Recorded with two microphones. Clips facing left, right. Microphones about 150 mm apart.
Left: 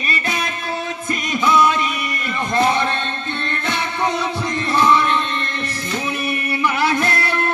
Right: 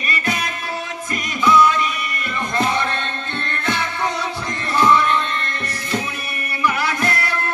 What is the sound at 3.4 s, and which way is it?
Music, 20° left (ahead or behind).